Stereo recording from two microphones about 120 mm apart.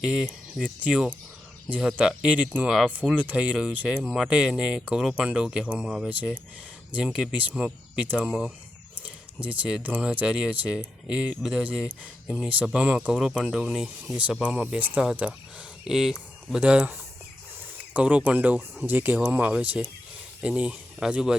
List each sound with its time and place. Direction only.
0.0 s speech: 5° right (ahead or behind)